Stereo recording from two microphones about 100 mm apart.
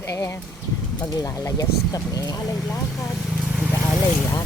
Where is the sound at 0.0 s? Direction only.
30° left (ahead or behind).